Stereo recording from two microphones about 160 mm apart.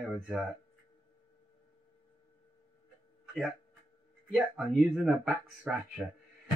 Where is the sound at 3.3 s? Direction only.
Centre (ahead or behind).